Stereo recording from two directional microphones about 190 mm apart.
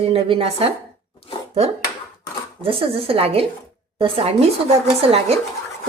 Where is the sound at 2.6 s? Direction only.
30° right (ahead or behind).